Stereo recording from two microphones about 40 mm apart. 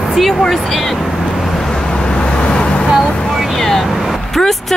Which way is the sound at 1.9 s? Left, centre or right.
Left.